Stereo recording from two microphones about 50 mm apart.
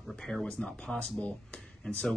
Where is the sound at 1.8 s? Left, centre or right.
Centre.